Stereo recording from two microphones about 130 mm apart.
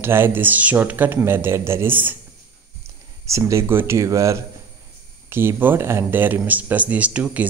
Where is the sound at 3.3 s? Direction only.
25° right (ahead or behind).